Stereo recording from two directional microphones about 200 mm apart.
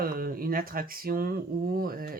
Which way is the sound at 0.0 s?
45° right (ahead or behind).